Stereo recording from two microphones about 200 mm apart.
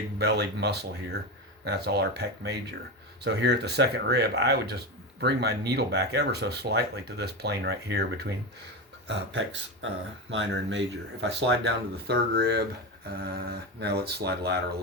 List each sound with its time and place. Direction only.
0.2 s speech: 55° right (ahead or behind)